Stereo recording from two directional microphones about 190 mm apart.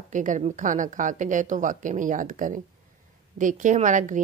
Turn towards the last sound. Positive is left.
turn(degrees=-40)  # may be behind; listen again after turning